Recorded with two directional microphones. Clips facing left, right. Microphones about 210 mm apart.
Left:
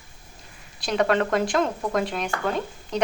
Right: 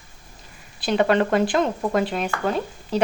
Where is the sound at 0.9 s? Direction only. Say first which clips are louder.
Right 3 dB; 30° right (ahead or behind).